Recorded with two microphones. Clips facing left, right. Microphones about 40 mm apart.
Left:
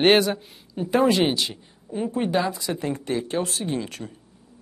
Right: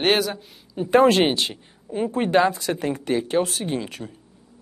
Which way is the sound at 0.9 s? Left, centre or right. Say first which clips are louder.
Right 4 dB; right.